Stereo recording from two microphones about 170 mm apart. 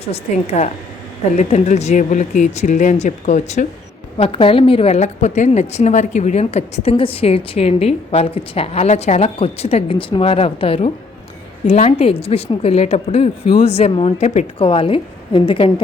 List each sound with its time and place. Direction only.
0.0 s a woman's voice: 40° left (ahead or behind)
4.2 s a woman's voice: 30° left (ahead or behind)
14.7 s a woman's voice: 30° left (ahead or behind)